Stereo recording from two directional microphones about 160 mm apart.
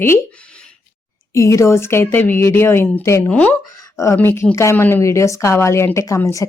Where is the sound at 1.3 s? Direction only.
20° left (ahead or behind).